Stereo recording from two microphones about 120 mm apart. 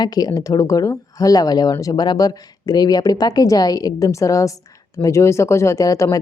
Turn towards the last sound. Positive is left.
turn(degrees=30)  # may be behind; listen again after turning